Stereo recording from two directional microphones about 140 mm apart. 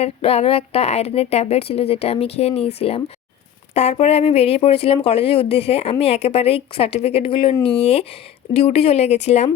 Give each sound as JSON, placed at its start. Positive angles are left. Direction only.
{"t": 0.0, "sound": "speech", "side_deg": 45}